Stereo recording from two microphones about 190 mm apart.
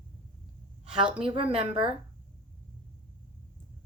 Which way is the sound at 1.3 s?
30° right (ahead or behind).